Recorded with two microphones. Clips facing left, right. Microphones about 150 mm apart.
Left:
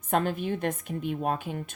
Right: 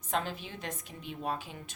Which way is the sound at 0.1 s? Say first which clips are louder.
Left 8 dB; 55° left (ahead or behind).